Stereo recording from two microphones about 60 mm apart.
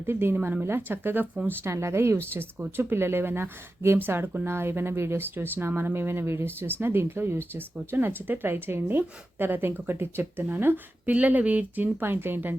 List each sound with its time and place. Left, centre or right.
0.0 s speech: right
1.7 s speech: right